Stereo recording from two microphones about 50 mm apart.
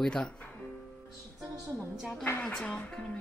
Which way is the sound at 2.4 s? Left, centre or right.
Centre.